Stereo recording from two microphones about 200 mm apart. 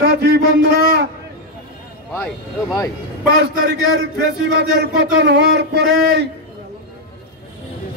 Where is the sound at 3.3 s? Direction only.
55° right (ahead or behind).